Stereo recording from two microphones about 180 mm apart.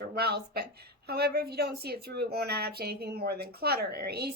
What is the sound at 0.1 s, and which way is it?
A woman's voice, 60° right (ahead or behind).